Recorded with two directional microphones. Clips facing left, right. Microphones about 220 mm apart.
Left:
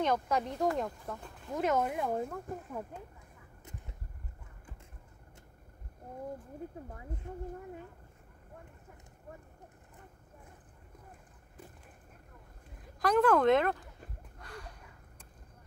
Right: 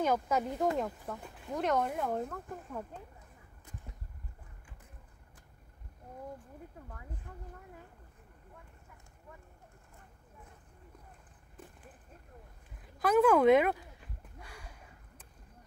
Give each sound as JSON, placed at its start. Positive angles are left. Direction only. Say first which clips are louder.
{"t": 0.0, "sound": "speech", "louder": "even", "side_deg": -5}
{"t": 7.3, "sound": "speech", "louder": "left 12 dB", "side_deg": 25}
{"t": 13.0, "sound": "speech", "louder": "right 1 dB", "side_deg": -5}
{"t": 14.4, "sound": "a sound", "louder": "left 6 dB", "side_deg": -5}